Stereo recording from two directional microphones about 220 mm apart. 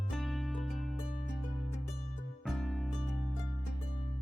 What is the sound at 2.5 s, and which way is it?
Music, centre (ahead or behind).